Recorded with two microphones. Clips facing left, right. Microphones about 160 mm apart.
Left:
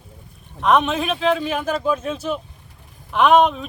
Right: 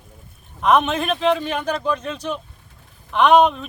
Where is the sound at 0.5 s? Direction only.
Centre (ahead or behind).